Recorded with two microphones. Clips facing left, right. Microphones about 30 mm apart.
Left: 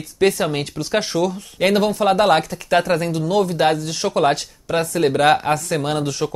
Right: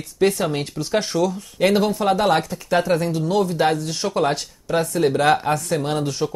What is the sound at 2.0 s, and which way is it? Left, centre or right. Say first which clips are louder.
Speech: left 3 dB; left.